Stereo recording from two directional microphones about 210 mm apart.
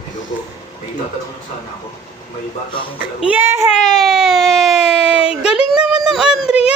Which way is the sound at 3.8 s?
Centre (ahead or behind).